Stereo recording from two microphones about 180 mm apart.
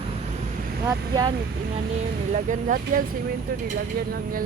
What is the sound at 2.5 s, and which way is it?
Speech, 45° right (ahead or behind).